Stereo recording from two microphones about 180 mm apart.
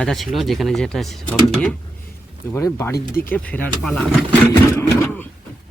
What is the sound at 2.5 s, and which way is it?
Speech, 15° left (ahead or behind).